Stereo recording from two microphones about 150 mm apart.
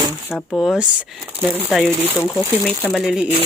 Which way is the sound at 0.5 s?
Centre (ahead or behind).